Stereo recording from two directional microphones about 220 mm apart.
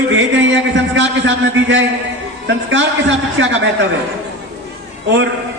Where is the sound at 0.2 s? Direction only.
55° right (ahead or behind).